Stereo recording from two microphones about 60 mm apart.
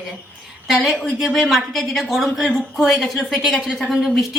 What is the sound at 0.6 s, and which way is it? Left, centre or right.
A woman's voice, centre.